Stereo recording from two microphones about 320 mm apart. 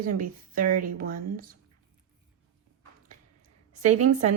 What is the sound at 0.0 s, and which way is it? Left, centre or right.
A woman's voice, right.